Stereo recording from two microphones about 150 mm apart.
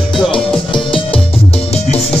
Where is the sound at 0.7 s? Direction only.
35° left (ahead or behind).